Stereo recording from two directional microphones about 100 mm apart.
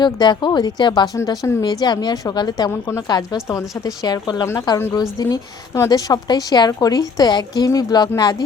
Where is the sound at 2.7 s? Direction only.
25° left (ahead or behind).